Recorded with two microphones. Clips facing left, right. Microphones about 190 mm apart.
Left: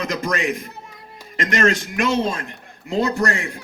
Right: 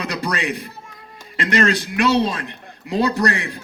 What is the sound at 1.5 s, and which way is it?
Speech, 35° right (ahead or behind).